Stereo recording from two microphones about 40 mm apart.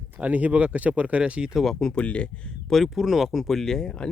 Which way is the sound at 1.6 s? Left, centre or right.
Centre.